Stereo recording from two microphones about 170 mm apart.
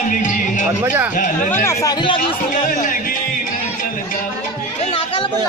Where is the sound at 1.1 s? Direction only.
50° left (ahead or behind).